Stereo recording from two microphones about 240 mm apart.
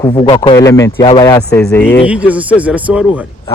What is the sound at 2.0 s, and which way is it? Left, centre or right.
Speech, centre.